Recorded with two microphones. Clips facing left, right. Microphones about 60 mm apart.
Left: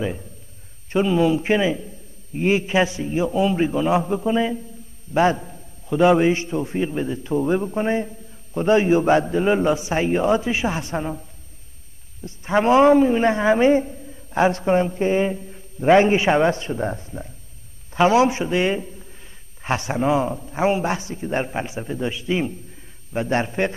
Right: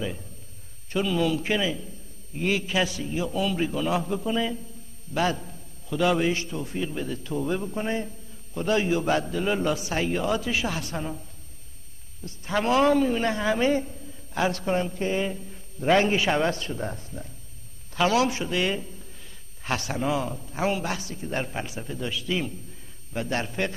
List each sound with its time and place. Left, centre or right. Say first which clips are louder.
0.9 s a man's voice: left 6 dB; left